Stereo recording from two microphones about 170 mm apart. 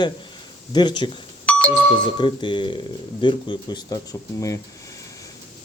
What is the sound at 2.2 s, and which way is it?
Speech, 30° left (ahead or behind).